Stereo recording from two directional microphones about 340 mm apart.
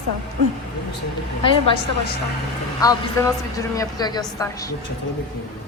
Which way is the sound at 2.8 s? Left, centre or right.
Centre.